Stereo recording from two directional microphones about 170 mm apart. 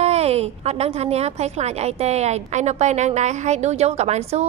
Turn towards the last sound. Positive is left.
turn(degrees=-40)  # may be behind; listen again after turning